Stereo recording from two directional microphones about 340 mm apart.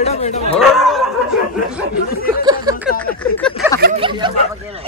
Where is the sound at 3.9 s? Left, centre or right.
Centre.